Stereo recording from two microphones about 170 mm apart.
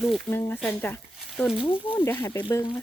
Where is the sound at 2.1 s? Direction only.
15° left (ahead or behind).